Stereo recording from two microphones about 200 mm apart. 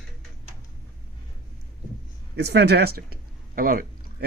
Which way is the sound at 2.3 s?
55° right (ahead or behind).